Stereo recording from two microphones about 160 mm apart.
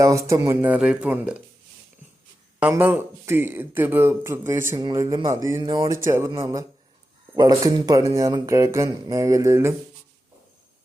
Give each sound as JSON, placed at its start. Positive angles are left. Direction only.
{"t": 0.0, "sound": "speech", "side_deg": -20}
{"t": 2.6, "sound": "speech", "side_deg": -10}
{"t": 6.1, "sound": "speech", "side_deg": -20}